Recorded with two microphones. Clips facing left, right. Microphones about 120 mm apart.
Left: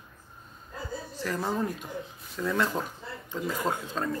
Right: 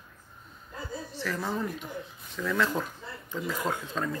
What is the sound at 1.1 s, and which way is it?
Speech, 15° left (ahead or behind).